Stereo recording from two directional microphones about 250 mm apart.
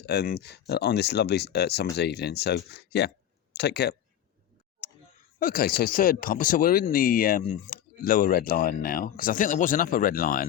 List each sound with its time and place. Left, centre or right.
0.0 s speech: left
5.4 s speech: left